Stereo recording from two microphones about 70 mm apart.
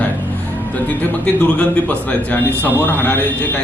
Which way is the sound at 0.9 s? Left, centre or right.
Left.